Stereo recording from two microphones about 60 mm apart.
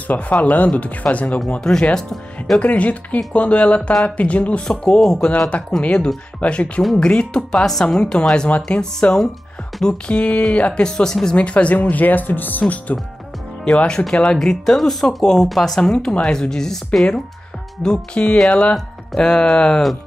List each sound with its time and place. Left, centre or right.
0.1 s speech: left
1.5 s speech: centre
2.6 s speech: left
4.6 s speech: centre
11.3 s speech: left
13.7 s speech: centre